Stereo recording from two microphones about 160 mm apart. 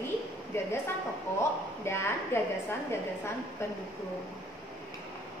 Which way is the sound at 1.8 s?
15° left (ahead or behind).